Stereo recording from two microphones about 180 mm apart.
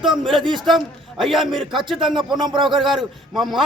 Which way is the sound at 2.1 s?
25° right (ahead or behind).